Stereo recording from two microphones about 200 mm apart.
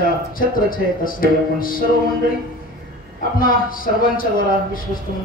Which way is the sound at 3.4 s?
45° left (ahead or behind).